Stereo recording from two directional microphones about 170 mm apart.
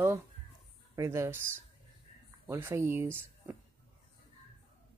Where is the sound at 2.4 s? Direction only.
15° right (ahead or behind).